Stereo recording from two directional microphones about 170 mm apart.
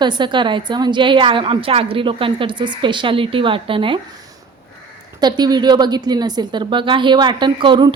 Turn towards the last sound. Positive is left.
turn(degrees=-30)  # may be behind; listen again after turning